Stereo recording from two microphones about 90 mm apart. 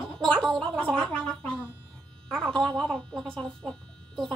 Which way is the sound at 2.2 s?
5° left (ahead or behind).